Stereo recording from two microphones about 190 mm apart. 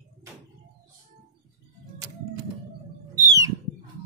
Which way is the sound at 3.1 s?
15° right (ahead or behind).